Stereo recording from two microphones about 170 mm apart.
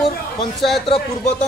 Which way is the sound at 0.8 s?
30° left (ahead or behind).